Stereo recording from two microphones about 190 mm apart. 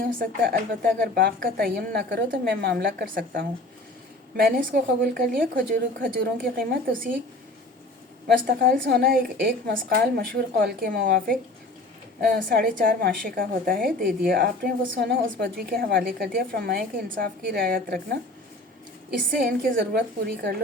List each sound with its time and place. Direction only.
0.2 s a woman's voice: 50° right (ahead or behind)
8.3 s a woman's voice: 50° right (ahead or behind)
19.3 s a woman's voice: 50° right (ahead or behind)